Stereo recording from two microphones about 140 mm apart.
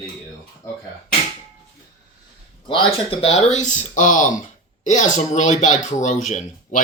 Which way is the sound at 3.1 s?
50° left (ahead or behind).